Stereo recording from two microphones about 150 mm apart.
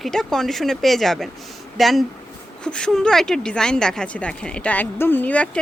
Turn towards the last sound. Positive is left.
turn(degrees=10)  # may be behind; listen again after turning